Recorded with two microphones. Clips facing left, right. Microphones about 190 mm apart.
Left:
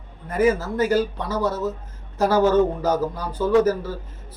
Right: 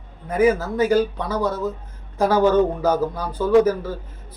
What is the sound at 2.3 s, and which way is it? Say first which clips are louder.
Speech: right 1 dB; 15° right (ahead or behind).